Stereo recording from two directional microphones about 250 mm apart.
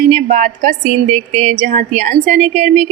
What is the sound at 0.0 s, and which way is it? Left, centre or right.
A woman's voice, right.